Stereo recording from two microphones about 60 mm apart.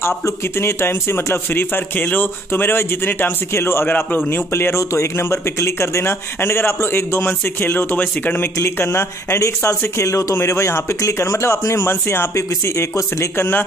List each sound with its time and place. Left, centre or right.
0.2 s a man's voice: left
3.5 s speech: left
3.8 s a man's voice: left
4.3 s a man's voice: left
8.7 s speech: left
9.7 s speech: left
13.4 s a man's voice: left